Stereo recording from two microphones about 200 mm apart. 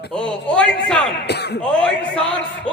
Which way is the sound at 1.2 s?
55° left (ahead or behind).